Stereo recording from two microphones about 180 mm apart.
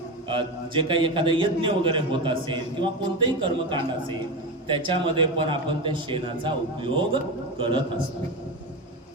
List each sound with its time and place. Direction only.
0.3 s a man's voice: 30° right (ahead or behind)